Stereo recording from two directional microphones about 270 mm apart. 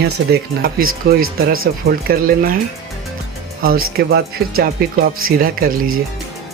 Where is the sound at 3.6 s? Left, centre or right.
Right.